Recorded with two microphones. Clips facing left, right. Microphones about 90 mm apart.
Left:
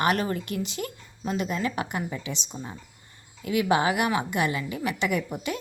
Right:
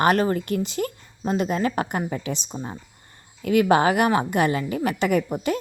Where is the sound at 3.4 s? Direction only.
50° right (ahead or behind).